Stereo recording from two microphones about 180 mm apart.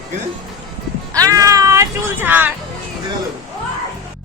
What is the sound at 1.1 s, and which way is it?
Speech, 20° right (ahead or behind).